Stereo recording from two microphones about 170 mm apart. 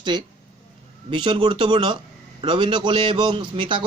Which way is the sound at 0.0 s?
25° right (ahead or behind).